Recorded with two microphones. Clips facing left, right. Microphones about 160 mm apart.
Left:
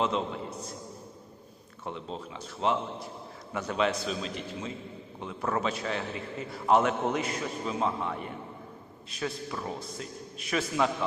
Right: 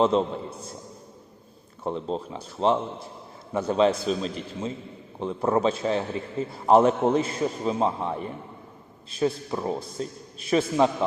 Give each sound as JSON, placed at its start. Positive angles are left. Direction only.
{"t": 0.0, "sound": "a man's voice", "side_deg": -30}
{"t": 1.8, "sound": "a man's voice", "side_deg": -35}